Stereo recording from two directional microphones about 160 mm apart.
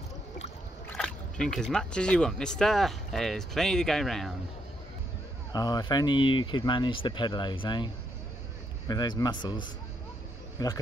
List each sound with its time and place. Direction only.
0.8 s speech: 5° left (ahead or behind)
5.5 s speech: 25° left (ahead or behind)